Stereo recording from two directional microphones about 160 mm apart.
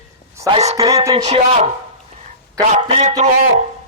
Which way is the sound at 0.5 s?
45° right (ahead or behind).